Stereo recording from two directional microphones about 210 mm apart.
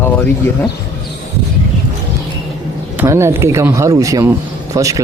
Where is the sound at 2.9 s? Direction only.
15° right (ahead or behind).